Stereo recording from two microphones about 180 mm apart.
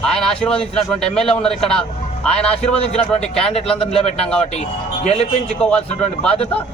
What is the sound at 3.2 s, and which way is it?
A man's voice, 5° left (ahead or behind).